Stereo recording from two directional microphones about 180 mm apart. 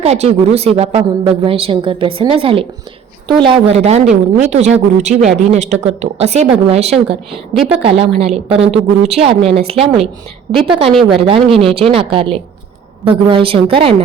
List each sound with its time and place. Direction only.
0.0 s a woman's voice: 35° right (ahead or behind)
7.5 s a woman's voice: centre (ahead or behind)
7.9 s a woman's voice: 35° right (ahead or behind)